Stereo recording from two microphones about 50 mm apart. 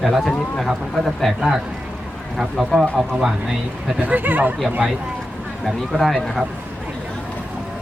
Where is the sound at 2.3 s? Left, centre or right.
Centre.